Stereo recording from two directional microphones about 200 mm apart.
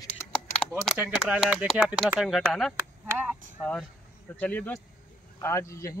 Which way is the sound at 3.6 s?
5° left (ahead or behind).